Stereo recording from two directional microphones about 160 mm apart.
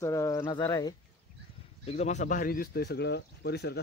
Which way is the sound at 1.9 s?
45° left (ahead or behind).